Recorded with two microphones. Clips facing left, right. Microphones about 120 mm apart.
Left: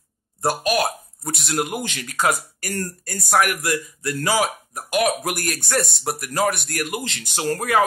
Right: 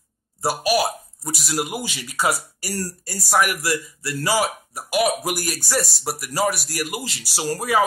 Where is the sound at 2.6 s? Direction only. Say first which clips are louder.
Left 1 dB; 55° left (ahead or behind).